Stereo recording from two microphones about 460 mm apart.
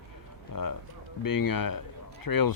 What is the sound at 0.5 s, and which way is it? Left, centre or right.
Speech, left.